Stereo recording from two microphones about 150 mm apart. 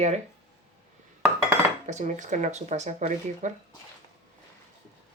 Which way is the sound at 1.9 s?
55° right (ahead or behind).